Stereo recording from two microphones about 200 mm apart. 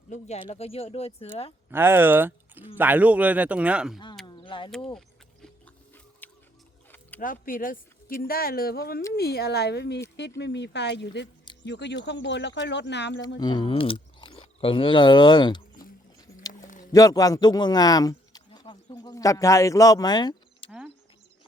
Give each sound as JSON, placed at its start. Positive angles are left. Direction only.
{"t": 0.1, "sound": "speech", "side_deg": 35}
{"t": 1.7, "sound": "speech", "side_deg": -10}
{"t": 3.9, "sound": "a sound", "side_deg": 20}
{"t": 7.2, "sound": "speech", "side_deg": 45}
{"t": 13.4, "sound": "speech", "side_deg": 20}
{"t": 16.8, "sound": "speech", "side_deg": 15}
{"t": 20.7, "sound": "cricket", "side_deg": -5}